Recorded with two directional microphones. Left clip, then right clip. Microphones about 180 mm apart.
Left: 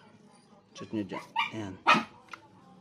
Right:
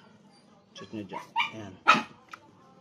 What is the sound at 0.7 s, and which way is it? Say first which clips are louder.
Dog: left 3 dB; 55° left (ahead or behind).